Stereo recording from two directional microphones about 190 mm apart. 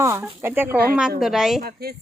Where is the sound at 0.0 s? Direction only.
15° right (ahead or behind).